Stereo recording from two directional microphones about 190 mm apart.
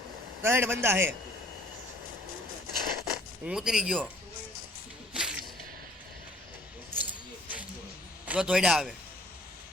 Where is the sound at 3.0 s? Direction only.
5° right (ahead or behind).